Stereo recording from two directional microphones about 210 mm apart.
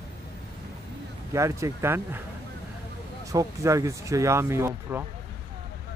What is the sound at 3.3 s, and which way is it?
Speech, 15° right (ahead or behind).